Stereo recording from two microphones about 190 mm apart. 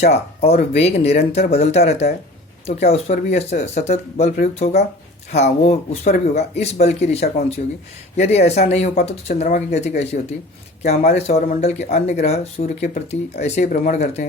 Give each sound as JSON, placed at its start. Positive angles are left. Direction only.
{"t": 0.0, "sound": "speech", "side_deg": 35}